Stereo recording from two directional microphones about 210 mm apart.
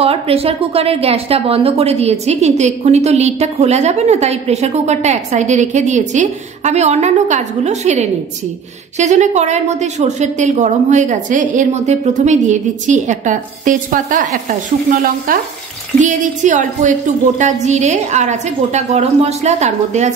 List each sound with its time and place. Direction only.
0.0 s a woman's voice: 30° right (ahead or behind)